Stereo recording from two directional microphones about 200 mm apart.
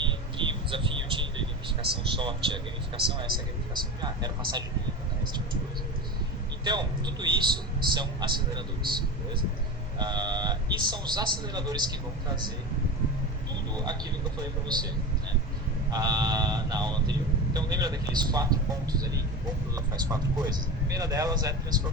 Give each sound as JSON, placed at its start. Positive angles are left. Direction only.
{"t": 0.0, "sound": "a sound", "side_deg": -25}
{"t": 2.0, "sound": "speech", "side_deg": -25}
{"t": 6.7, "sound": "speech", "side_deg": -20}
{"t": 13.7, "sound": "speech", "side_deg": -20}
{"t": 15.9, "sound": "speech", "side_deg": -20}